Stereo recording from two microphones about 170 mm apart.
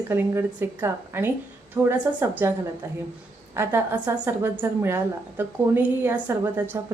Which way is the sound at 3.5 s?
15° right (ahead or behind).